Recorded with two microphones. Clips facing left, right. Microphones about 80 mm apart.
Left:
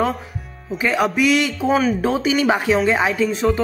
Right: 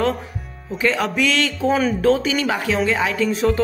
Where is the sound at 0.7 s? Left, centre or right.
Centre.